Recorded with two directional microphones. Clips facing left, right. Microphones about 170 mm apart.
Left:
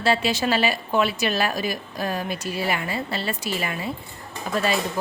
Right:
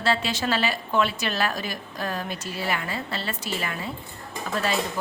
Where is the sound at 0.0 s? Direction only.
10° left (ahead or behind).